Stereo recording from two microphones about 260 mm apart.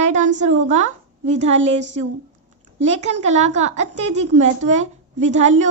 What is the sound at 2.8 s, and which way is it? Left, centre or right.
A woman's voice, right.